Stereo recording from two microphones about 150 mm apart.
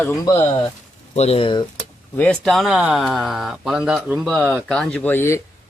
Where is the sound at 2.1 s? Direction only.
5° left (ahead or behind).